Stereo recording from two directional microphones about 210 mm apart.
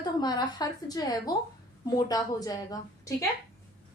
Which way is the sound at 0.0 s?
20° left (ahead or behind).